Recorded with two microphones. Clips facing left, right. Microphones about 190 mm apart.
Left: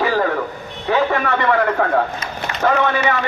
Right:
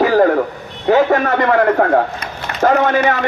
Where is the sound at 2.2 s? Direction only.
45° right (ahead or behind).